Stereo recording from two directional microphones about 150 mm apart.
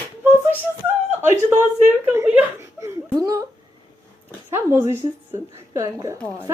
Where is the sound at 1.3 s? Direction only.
15° right (ahead or behind).